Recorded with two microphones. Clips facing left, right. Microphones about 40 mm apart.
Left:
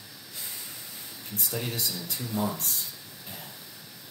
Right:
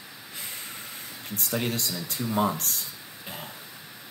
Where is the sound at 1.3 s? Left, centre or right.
Right.